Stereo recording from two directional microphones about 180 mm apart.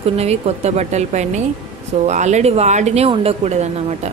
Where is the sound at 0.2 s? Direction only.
35° right (ahead or behind).